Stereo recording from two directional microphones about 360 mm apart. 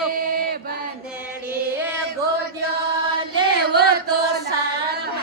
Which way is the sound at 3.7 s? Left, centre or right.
Right.